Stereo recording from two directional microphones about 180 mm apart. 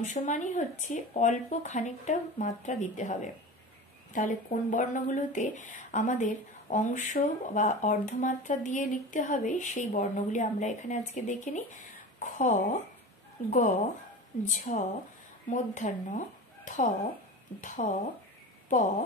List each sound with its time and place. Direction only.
0.0 s speech: 40° left (ahead or behind)